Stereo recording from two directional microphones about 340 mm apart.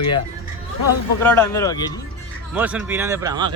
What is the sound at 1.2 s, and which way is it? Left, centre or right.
Speech, centre.